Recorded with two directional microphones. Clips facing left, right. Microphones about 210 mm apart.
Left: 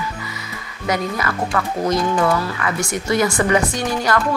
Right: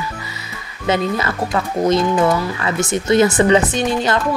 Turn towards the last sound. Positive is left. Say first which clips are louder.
# right 2 dB
turn(degrees=-25)  # may be behind; listen again after turning